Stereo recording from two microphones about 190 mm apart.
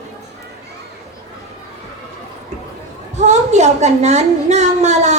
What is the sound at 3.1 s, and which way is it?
A woman's voice, 35° right (ahead or behind).